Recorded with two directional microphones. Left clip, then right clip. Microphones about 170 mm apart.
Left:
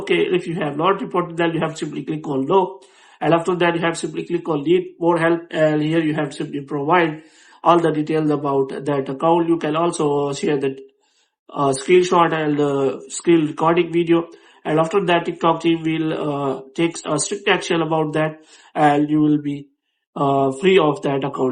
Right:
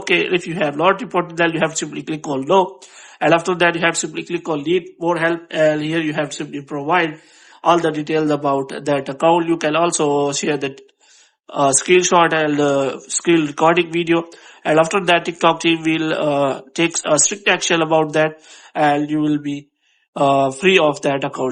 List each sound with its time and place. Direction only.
0.0 s speech: 30° right (ahead or behind)